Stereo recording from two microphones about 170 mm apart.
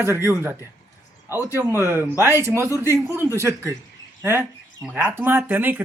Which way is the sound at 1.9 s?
15° right (ahead or behind).